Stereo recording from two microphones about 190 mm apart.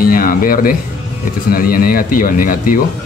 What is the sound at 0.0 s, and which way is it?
Speech, 50° left (ahead or behind).